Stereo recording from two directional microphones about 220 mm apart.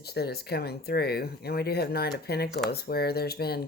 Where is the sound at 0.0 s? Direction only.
45° left (ahead or behind).